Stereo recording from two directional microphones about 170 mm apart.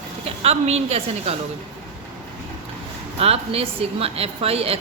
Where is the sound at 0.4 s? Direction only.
40° right (ahead or behind).